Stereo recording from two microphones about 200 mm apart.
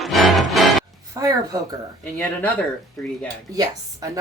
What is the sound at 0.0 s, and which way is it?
Music, centre (ahead or behind).